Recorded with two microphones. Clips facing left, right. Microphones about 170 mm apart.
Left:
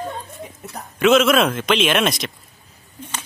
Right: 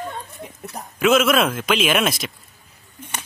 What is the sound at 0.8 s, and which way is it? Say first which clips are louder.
Speech: left 2 dB; centre (ahead or behind).